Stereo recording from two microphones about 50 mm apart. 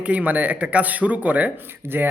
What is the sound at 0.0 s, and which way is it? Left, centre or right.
Speech, right.